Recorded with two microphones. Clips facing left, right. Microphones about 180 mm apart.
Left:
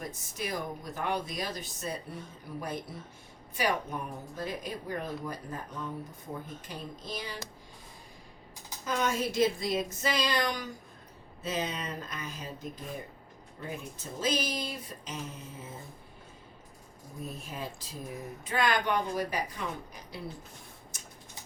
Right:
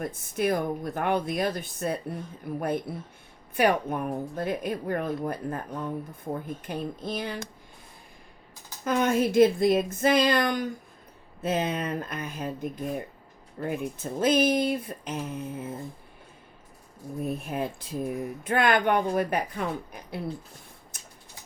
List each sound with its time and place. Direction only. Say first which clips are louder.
0.0 s speech: right 10 dB; 55° right (ahead or behind)
8.8 s speech: right 7 dB; 55° right (ahead or behind)
17.2 s speech: right 9 dB; 60° right (ahead or behind)
20.9 s typing: even; 55° right (ahead or behind)